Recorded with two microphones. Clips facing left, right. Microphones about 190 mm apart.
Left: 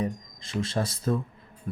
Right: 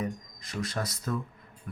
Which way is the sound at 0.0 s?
25° left (ahead or behind).